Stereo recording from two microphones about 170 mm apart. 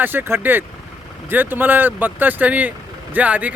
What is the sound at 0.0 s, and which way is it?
Speech, 10° right (ahead or behind).